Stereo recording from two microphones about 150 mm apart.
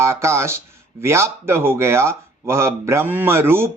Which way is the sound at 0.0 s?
20° right (ahead or behind).